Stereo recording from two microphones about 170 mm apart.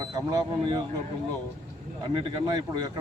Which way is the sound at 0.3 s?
25° right (ahead or behind).